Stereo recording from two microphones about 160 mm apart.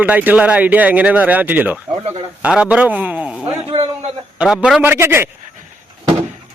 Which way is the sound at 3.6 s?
35° right (ahead or behind).